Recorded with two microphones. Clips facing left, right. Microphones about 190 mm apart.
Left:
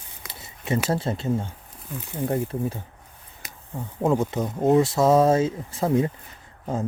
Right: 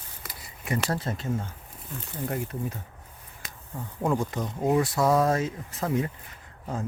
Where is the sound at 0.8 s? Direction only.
30° left (ahead or behind).